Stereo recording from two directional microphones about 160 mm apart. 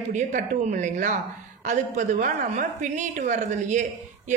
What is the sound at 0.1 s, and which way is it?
A woman's voice, 50° right (ahead or behind).